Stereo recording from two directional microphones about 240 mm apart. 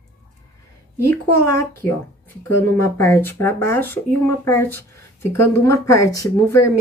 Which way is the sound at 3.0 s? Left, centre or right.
Centre.